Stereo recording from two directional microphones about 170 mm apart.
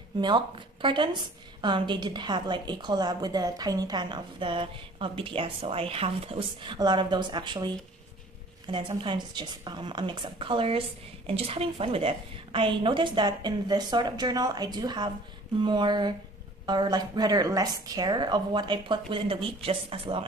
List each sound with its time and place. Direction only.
0.2 s a woman's voice: 25° right (ahead or behind)
8.7 s a woman's voice: 30° right (ahead or behind)